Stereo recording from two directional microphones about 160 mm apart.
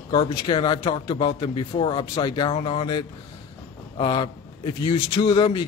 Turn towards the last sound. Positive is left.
turn(degrees=30)  # may be behind; listen again after turning